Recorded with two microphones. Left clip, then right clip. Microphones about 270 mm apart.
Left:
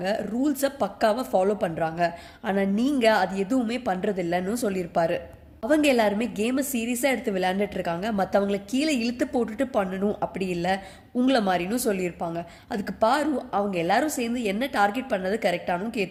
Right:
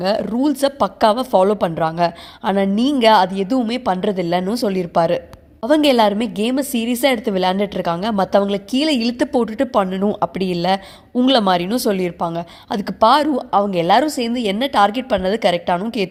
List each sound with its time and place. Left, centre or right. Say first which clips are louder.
0.0 s a woman's voice: right 8 dB; right